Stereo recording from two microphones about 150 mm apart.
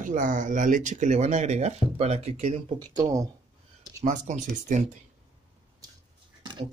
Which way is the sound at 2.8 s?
20° right (ahead or behind).